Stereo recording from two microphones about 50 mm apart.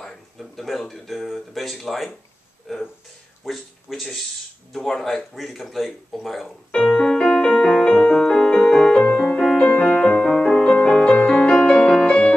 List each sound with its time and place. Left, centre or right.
0.0 s speech: centre
3.4 s speech: centre
6.7 s music: centre